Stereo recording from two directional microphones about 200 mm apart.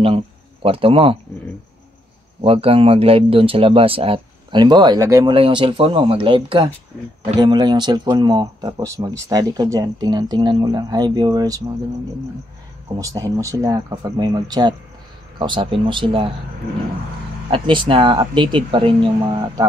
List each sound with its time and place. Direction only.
0.0 s a man's voice: 30° right (ahead or behind)
2.4 s speech: 30° right (ahead or behind)
13.0 s speech: 15° right (ahead or behind)
17.5 s speech: 25° right (ahead or behind)